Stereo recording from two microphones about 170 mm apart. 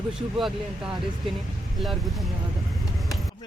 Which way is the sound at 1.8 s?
Centre (ahead or behind).